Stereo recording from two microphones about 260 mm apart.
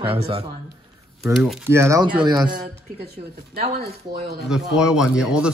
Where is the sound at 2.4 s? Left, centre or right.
Right.